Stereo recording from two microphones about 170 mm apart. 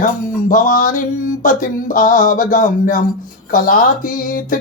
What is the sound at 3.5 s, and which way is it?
Speech, 55° left (ahead or behind).